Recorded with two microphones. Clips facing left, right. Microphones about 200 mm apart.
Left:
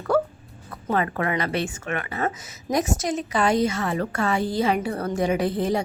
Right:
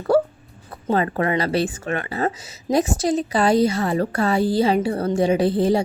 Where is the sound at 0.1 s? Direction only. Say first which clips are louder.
Right 4 dB; 30° right (ahead or behind).